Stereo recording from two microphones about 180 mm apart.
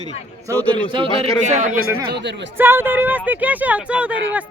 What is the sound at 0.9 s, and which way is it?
Speech, 35° right (ahead or behind).